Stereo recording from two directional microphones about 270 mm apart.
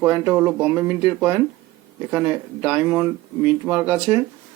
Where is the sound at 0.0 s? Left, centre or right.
Centre.